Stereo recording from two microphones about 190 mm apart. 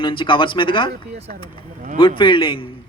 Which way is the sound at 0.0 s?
25° left (ahead or behind).